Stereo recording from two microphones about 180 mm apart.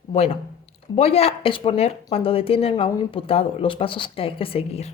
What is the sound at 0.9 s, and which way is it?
A woman's voice, 35° left (ahead or behind).